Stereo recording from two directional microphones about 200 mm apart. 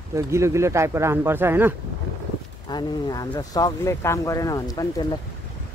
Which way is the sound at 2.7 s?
20° left (ahead or behind).